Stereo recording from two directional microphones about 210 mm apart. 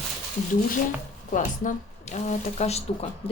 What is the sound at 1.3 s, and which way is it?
Speech, 40° left (ahead or behind).